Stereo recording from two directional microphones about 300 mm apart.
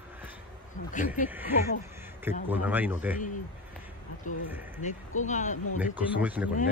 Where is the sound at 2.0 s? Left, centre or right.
Centre.